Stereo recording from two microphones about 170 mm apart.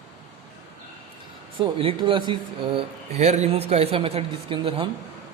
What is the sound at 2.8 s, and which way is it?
A woman's voice, 40° right (ahead or behind).